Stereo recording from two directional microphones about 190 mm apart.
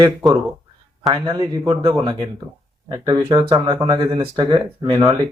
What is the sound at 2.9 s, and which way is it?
Speech, 20° right (ahead or behind).